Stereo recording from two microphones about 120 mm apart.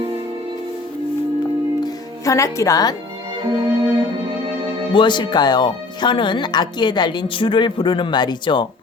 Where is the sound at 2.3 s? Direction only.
25° left (ahead or behind).